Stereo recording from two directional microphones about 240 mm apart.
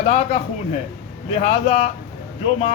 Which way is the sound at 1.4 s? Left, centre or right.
Left.